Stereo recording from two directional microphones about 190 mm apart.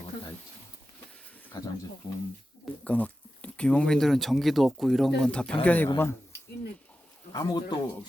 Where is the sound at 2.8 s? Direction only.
5° left (ahead or behind).